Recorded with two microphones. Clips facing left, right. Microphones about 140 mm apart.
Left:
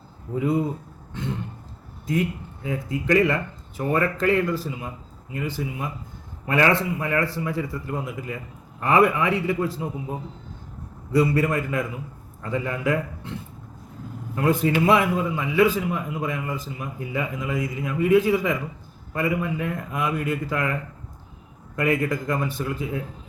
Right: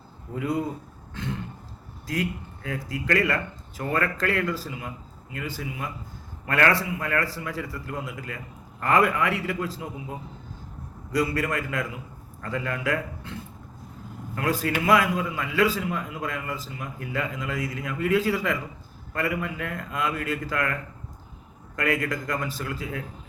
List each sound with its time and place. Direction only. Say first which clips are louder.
0.3 s speech: left 4 dB; 20° left (ahead or behind)
2.6 s a man's voice: left 4 dB; 20° left (ahead or behind)
14.3 s a man's voice: left 5 dB; 20° left (ahead or behind)
21.8 s speech: left 4 dB; 20° left (ahead or behind)